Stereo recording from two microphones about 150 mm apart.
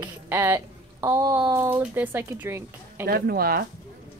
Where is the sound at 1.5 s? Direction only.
15° right (ahead or behind).